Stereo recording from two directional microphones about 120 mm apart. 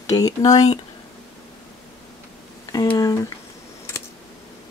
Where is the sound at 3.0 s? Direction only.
25° left (ahead or behind).